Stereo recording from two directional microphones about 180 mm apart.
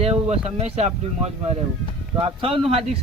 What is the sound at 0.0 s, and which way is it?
Speech, 35° right (ahead or behind).